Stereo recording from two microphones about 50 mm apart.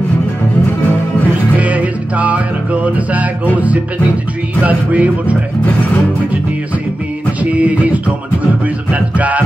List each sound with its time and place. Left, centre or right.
1.6 s music: right
7.5 s music: right
9.1 s music: right